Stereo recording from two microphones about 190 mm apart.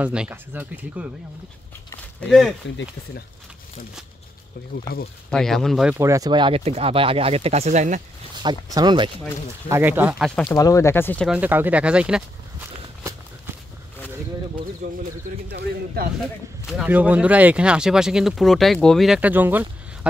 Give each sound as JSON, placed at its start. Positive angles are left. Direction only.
{"t": 0.0, "sound": "speech", "side_deg": -5}
{"t": 2.1, "sound": "speech", "side_deg": 0}
{"t": 5.3, "sound": "speech", "side_deg": 0}
{"t": 5.9, "sound": "speech", "side_deg": -15}
{"t": 8.4, "sound": "speech", "side_deg": -20}
{"t": 9.7, "sound": "speech", "side_deg": -10}
{"t": 10.5, "sound": "speech", "side_deg": 15}
{"t": 11.2, "sound": "speech", "side_deg": -10}
{"t": 15.5, "sound": "speech", "side_deg": -50}
{"t": 16.7, "sound": "speech", "side_deg": -5}